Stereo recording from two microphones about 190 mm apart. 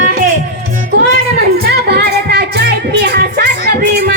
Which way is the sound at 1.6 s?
60° right (ahead or behind).